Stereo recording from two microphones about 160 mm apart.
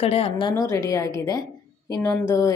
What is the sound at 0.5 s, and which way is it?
A woman's voice, 20° left (ahead or behind).